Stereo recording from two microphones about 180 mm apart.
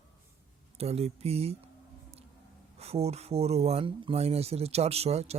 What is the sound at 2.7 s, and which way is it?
Speech, 35° right (ahead or behind).